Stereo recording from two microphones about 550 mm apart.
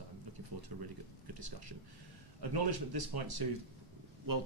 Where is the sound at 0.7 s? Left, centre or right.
Right.